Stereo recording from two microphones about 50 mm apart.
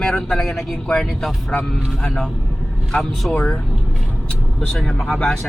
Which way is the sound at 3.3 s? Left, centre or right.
Centre.